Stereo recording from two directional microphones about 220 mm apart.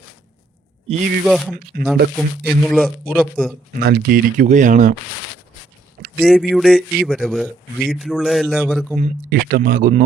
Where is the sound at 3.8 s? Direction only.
45° right (ahead or behind).